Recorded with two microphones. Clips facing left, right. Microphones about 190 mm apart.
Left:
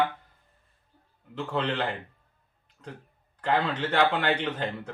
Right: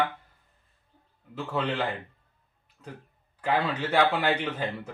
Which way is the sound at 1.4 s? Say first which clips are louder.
Even; 10° right (ahead or behind).